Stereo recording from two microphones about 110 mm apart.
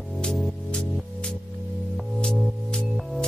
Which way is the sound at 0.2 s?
10° left (ahead or behind).